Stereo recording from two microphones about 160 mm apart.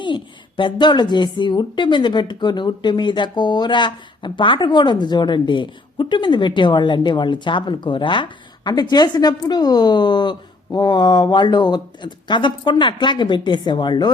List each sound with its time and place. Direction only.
0.0 s a woman's voice: 30° left (ahead or behind)